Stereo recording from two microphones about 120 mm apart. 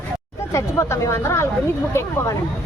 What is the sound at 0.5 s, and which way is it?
Speech, 25° left (ahead or behind).